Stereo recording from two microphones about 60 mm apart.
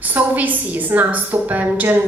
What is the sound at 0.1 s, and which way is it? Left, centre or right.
A woman's voice, right.